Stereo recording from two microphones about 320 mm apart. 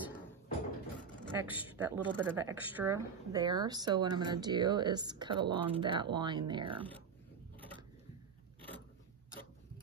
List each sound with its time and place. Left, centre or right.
1.2 s speech: centre